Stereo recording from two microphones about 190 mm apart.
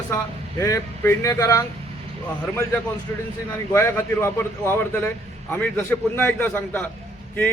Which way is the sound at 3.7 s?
15° left (ahead or behind).